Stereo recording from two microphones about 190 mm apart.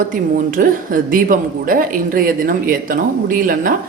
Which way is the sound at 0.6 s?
45° right (ahead or behind).